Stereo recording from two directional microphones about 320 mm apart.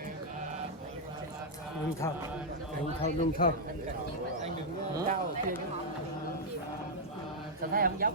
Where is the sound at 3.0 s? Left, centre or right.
Left.